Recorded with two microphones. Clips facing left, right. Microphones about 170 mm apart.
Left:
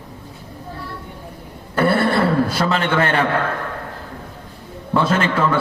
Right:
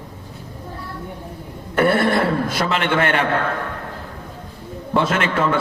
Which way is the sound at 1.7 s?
30° left (ahead or behind).